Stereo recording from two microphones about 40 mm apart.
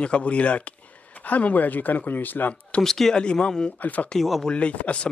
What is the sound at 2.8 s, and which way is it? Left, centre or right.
Speech, centre.